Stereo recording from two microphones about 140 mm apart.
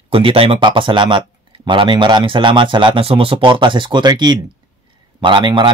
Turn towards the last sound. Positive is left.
turn(degrees=-35)  # may be behind; listen again after turning